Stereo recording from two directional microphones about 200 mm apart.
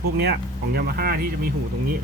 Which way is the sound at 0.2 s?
50° right (ahead or behind).